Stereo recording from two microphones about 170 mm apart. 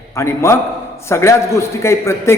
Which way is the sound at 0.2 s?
15° left (ahead or behind).